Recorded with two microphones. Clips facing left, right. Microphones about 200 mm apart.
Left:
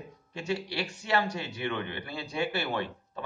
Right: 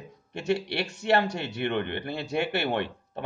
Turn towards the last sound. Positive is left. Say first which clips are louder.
# right 4 dB
turn(degrees=-65)  # may be behind; listen again after turning